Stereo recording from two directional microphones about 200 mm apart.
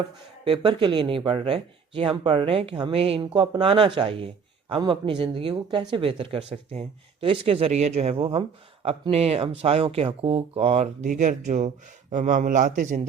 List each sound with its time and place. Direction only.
0.4 s a man's voice: 25° right (ahead or behind)